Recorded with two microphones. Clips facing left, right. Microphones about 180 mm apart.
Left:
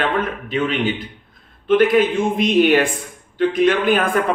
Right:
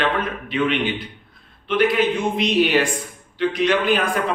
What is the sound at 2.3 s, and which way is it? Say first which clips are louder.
A man's voice: left 5 dB; 50° left (ahead or behind).